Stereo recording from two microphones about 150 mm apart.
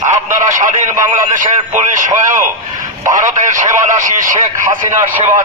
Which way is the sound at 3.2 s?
55° right (ahead or behind).